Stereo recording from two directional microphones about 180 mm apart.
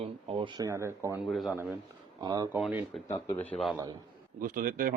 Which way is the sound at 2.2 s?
20° right (ahead or behind).